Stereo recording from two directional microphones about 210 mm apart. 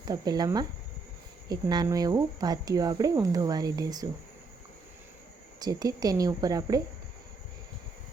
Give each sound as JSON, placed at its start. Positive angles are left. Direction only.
{"t": 0.0, "sound": "speech", "side_deg": -20}
{"t": 5.5, "sound": "speech", "side_deg": -20}